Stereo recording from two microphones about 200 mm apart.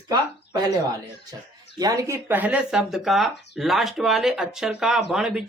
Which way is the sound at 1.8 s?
15° right (ahead or behind).